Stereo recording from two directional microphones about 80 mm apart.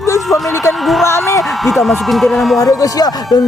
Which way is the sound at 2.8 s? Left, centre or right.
Left.